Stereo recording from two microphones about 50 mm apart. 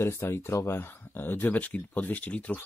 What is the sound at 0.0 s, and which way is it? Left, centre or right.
Speech, left.